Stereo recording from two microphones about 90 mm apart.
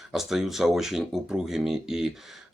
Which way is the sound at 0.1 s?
5° right (ahead or behind).